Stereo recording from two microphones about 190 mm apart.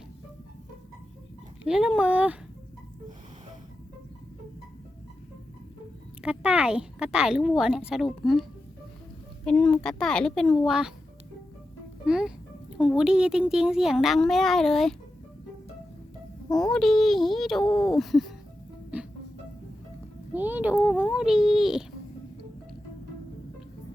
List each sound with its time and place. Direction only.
1.6 s speech: 5° right (ahead or behind)
6.2 s speech: 5° right (ahead or behind)
9.5 s speech: 5° left (ahead or behind)
12.0 s speech: 5° right (ahead or behind)
16.5 s speech: 20° left (ahead or behind)
16.7 s speech: centre (ahead or behind)
20.3 s speech: 10° right (ahead or behind)